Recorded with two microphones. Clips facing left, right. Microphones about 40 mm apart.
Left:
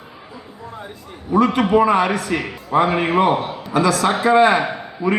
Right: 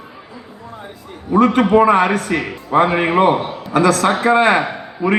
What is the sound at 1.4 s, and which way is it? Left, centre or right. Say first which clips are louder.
A man's voice: right 3 dB; right.